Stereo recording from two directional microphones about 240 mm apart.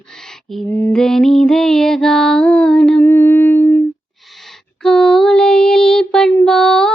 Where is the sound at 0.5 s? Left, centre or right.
Centre.